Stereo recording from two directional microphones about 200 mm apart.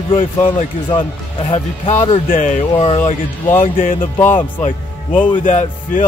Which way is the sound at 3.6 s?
45° left (ahead or behind).